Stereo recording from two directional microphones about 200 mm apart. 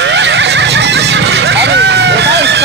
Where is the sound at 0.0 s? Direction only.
60° right (ahead or behind).